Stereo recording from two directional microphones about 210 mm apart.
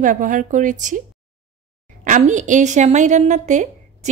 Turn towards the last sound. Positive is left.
turn(degrees=-35)  # may be behind; listen again after turning